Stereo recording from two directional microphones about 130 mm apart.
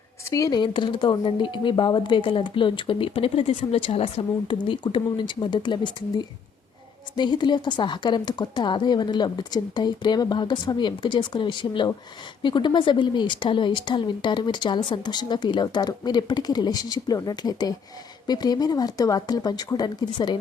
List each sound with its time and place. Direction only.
0.3 s speech: 25° left (ahead or behind)